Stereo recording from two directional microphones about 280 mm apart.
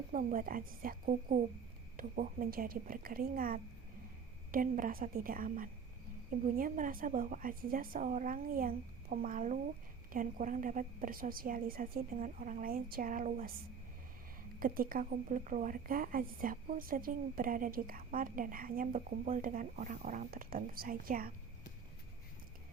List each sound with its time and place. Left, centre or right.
0.1 s a woman's voice: right
14.6 s a woman's voice: right